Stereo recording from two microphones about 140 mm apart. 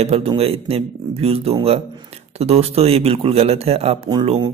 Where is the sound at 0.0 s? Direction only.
45° right (ahead or behind).